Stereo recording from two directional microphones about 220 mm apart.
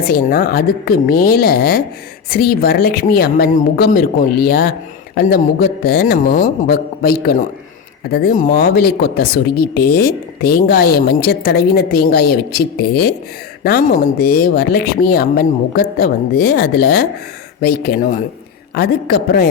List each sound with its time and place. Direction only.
0.0 s speech: 45° left (ahead or behind)